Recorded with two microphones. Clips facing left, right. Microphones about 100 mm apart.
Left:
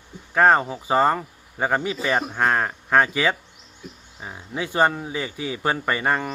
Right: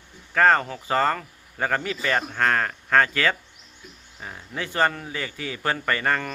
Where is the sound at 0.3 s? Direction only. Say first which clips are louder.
Left 2 dB; 15° left (ahead or behind).